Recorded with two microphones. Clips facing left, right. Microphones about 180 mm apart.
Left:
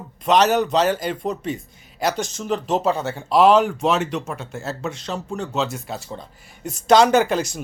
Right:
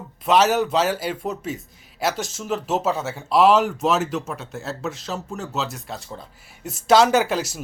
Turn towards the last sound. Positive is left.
turn(degrees=-5)  # may be behind; listen again after turning